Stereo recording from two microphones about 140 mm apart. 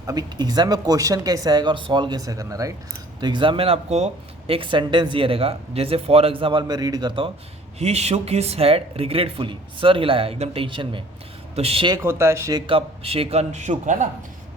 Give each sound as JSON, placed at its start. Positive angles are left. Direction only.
{"t": 0.0, "sound": "speech", "side_deg": -25}
{"t": 7.8, "sound": "speech", "side_deg": -50}
{"t": 12.0, "sound": "speech", "side_deg": -20}
{"t": 12.6, "sound": "speech", "side_deg": -40}